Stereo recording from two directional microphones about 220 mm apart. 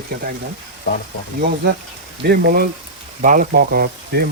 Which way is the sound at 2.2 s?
45° right (ahead or behind).